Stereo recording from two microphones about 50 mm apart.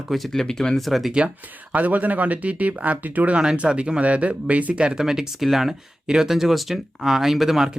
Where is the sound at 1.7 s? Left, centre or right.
Right.